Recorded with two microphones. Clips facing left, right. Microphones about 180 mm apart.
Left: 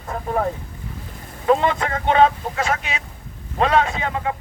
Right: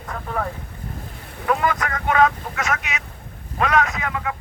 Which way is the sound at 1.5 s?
25° left (ahead or behind).